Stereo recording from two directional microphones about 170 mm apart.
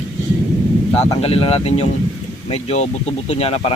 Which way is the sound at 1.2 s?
35° left (ahead or behind).